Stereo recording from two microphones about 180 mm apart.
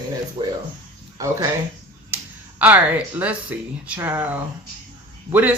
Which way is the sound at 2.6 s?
10° right (ahead or behind).